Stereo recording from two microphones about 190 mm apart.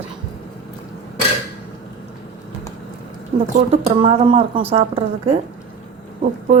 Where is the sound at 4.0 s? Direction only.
30° right (ahead or behind).